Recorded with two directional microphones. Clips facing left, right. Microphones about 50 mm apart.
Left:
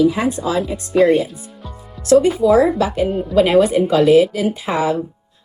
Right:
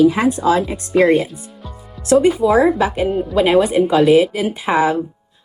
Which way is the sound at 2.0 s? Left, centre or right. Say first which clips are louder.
Left 1 dB; right.